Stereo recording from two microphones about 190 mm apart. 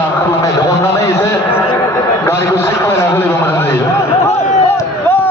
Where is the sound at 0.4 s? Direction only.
15° left (ahead or behind).